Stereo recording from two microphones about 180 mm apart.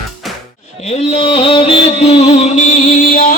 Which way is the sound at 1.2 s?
30° left (ahead or behind).